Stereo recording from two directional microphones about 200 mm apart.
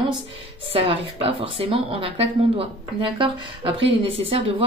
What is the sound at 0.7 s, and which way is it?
Speech, 25° right (ahead or behind).